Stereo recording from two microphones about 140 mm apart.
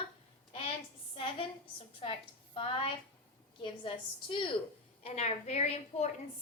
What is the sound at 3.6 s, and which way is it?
Speech, 35° left (ahead or behind).